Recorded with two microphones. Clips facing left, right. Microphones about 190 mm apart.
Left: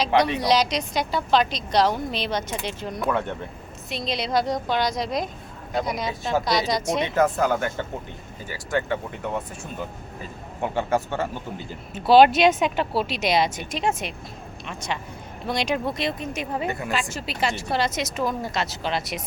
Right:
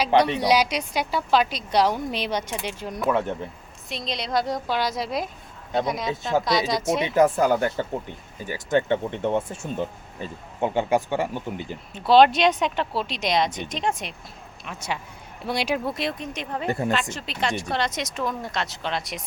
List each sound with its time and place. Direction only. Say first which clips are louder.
0.3 s a woman's voice: even; 10° right (ahead or behind)
7.2 s a woman's voice: right 3 dB; 15° right (ahead or behind)
11.9 s speech: left 1 dB; 5° left (ahead or behind)
14.7 s a woman's voice: even; 10° right (ahead or behind); by 16.6 s 10° left (ahead or behind)
16.6 s speech: right 3 dB; 30° right (ahead or behind)
16.9 s speech: right 1 dB; 5° left (ahead or behind)